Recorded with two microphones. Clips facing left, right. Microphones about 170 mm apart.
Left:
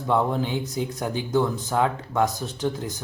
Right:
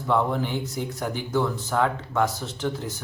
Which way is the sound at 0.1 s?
15° left (ahead or behind).